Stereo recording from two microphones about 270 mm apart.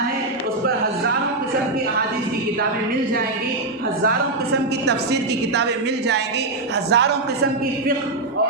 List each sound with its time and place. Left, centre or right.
4.9 s a woman's voice: right